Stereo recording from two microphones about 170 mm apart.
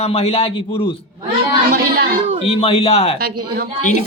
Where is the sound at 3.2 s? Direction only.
65° right (ahead or behind).